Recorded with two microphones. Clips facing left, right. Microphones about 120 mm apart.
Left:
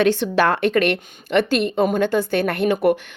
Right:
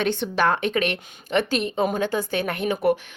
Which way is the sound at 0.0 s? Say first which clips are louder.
Left 5 dB; 90° left.